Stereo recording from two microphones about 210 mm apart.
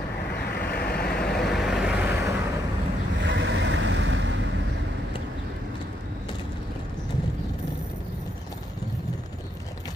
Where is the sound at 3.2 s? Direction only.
55° right (ahead or behind).